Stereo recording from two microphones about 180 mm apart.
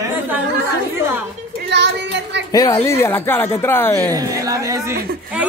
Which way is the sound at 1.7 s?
70° right (ahead or behind).